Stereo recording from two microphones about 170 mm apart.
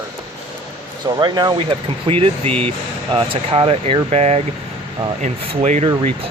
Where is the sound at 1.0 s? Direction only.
25° right (ahead or behind).